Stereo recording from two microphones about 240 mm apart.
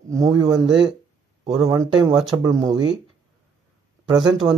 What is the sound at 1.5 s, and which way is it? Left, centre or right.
Speech, centre.